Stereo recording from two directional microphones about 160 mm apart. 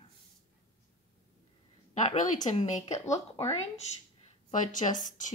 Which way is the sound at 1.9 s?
50° left (ahead or behind).